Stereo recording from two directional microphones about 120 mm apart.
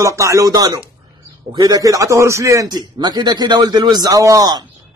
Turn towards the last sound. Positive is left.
turn(degrees=-30)  # may be behind; listen again after turning